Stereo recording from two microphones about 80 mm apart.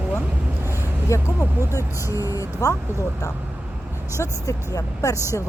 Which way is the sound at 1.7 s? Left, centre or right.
Left.